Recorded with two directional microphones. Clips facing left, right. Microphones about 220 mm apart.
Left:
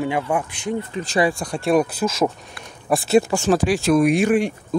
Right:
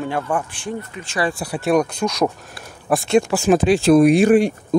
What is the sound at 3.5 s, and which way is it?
Speech, 25° right (ahead or behind).